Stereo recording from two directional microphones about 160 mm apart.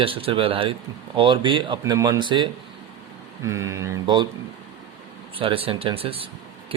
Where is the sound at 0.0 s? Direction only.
35° right (ahead or behind).